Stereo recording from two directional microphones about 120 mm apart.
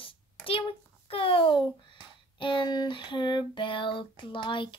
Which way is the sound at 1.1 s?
50° left (ahead or behind).